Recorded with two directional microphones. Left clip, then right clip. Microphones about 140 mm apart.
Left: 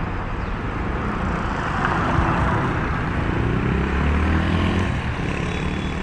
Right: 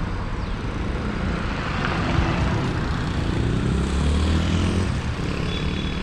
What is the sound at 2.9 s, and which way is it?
Vehicle, 40° right (ahead or behind).